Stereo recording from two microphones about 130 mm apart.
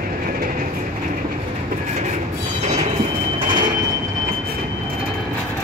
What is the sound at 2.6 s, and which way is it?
Train, 50° right (ahead or behind).